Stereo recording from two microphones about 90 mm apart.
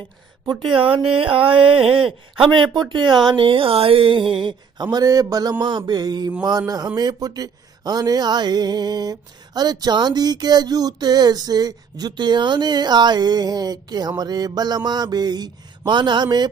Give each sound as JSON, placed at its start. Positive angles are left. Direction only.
{"t": 0.7, "sound": "speech", "side_deg": -80}
{"t": 2.0, "sound": "a man's voice", "side_deg": -5}
{"t": 2.5, "sound": "speech", "side_deg": -60}
{"t": 4.9, "sound": "speech", "side_deg": -40}